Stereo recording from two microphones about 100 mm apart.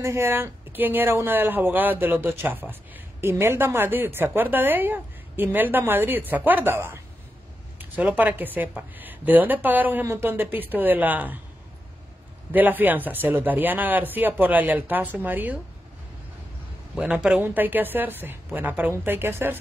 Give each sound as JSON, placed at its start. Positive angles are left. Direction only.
{"t": 0.0, "sound": "speech", "side_deg": -25}
{"t": 12.5, "sound": "speech", "side_deg": -20}
{"t": 16.9, "sound": "speech", "side_deg": -10}